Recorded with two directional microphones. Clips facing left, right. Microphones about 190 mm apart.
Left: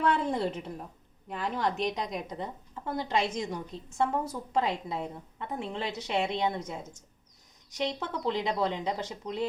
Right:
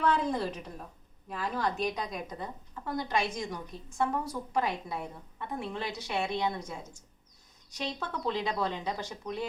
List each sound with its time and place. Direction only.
0.0 s a woman's voice: 25° left (ahead or behind)
7.7 s a woman's voice: 20° left (ahead or behind)